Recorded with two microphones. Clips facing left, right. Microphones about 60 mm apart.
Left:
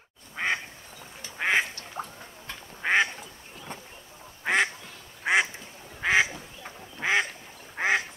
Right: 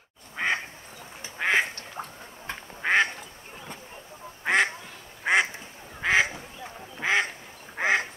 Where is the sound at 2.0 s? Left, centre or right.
Centre.